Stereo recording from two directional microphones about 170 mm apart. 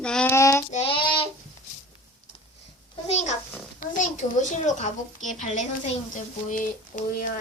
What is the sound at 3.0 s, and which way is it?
A child's voice, 40° left (ahead or behind).